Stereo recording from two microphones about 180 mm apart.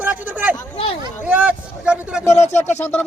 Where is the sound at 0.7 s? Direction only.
30° left (ahead or behind).